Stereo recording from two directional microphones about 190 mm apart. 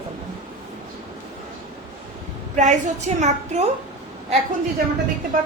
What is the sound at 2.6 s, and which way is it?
A woman's voice, 40° right (ahead or behind).